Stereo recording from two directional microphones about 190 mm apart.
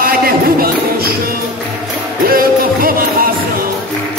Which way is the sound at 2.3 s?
50° right (ahead or behind).